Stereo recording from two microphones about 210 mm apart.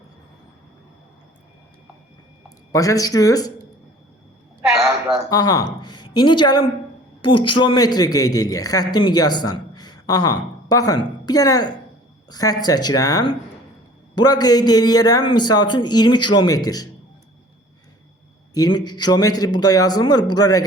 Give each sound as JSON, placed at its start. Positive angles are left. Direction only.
{"t": 2.7, "sound": "speech", "side_deg": 15}
{"t": 4.8, "sound": "a sound", "side_deg": -10}
{"t": 5.3, "sound": "a man's voice", "side_deg": 15}
{"t": 18.5, "sound": "a man's voice", "side_deg": 20}